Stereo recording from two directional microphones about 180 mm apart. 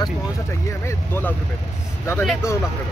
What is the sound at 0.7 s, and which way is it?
Speech, 15° left (ahead or behind).